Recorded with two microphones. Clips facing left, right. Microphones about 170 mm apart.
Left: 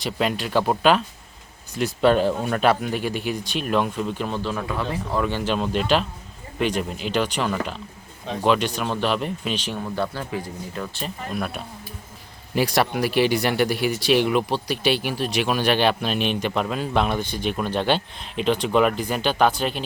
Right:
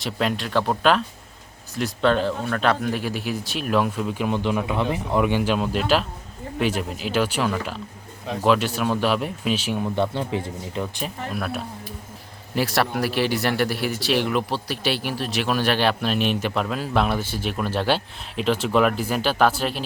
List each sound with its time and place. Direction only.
0.0 s a man's voice: centre (ahead or behind)
9.9 s speech: 20° right (ahead or behind)
11.0 s a man's voice: centre (ahead or behind)